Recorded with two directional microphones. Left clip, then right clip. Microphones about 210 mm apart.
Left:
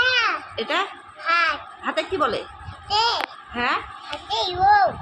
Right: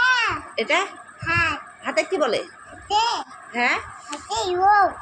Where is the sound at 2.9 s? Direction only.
25° left (ahead or behind).